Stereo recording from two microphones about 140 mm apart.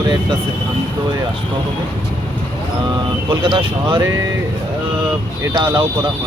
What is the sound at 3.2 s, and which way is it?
Speech, 40° right (ahead or behind).